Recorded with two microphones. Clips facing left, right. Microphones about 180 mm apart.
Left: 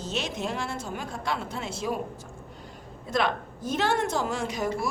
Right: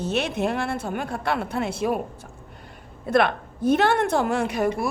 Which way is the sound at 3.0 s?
60° right (ahead or behind).